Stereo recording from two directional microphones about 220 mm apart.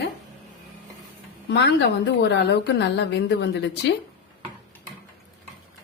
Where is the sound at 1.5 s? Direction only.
50° left (ahead or behind).